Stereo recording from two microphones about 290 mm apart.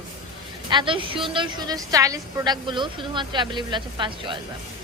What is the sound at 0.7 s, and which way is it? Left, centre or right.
A woman's voice, centre.